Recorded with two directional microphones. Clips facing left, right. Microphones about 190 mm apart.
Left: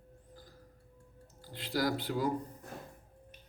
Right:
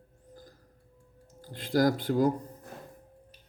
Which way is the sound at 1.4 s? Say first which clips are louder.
Right 8 dB; 45° right (ahead or behind).